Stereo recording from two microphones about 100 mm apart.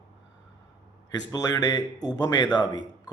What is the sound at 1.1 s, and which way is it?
A man's voice, 35° left (ahead or behind).